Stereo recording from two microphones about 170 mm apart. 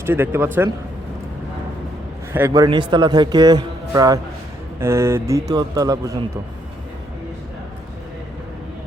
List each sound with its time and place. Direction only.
0.0 s speech: 15° right (ahead or behind)
2.3 s a man's voice: 15° right (ahead or behind)